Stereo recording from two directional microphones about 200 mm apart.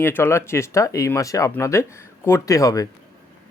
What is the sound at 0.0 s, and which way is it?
Speech, 10° left (ahead or behind).